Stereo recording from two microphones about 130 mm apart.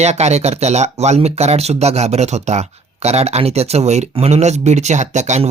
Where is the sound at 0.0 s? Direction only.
60° right (ahead or behind).